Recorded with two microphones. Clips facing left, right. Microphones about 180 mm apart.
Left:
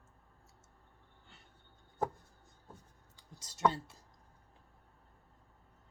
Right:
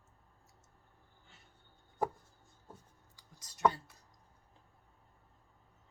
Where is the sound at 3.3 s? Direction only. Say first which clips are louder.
Left 5 dB; 25° left (ahead or behind).